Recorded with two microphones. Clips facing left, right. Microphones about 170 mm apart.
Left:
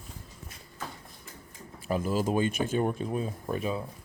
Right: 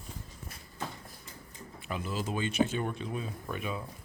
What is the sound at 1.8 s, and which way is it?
Speech, 45° left (ahead or behind).